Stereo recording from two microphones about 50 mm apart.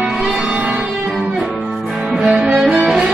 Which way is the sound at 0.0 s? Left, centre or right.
Centre.